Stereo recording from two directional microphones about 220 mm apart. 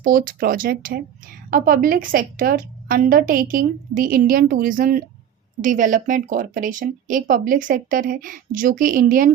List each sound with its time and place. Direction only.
0.0 s speech: 40° right (ahead or behind)